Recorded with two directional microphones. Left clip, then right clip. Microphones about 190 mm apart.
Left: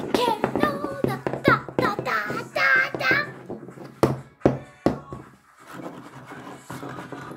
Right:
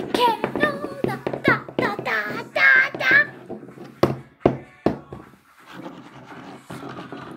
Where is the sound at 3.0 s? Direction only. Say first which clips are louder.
Right 5 dB; 5° right (ahead or behind).